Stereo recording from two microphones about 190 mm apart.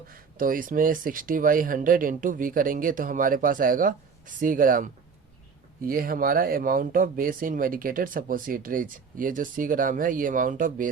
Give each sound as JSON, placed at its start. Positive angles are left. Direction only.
{"t": 0.1, "sound": "speech", "side_deg": -45}